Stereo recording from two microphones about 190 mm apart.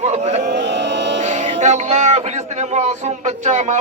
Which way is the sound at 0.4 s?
65° right (ahead or behind).